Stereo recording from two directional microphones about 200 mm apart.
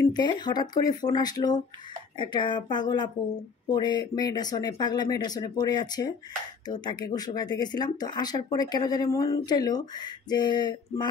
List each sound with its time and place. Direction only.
0.1 s speech: 20° left (ahead or behind)